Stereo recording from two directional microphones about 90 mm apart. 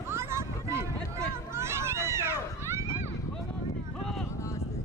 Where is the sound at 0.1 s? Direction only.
30° right (ahead or behind).